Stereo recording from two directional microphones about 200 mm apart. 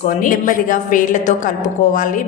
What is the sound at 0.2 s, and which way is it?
A woman's voice, 40° left (ahead or behind).